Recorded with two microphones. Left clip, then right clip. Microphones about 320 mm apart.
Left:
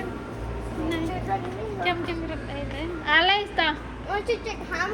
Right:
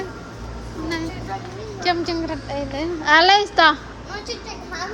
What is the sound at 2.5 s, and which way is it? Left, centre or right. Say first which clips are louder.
Speech: right 7 dB; right.